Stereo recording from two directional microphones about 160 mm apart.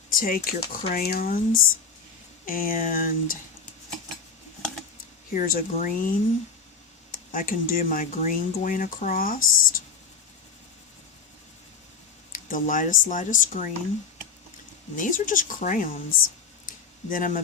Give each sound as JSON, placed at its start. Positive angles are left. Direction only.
{"t": 0.1, "sound": "speech", "side_deg": 65}
{"t": 5.3, "sound": "speech", "side_deg": 60}
{"t": 12.3, "sound": "speech", "side_deg": 55}
{"t": 14.9, "sound": "speech", "side_deg": 55}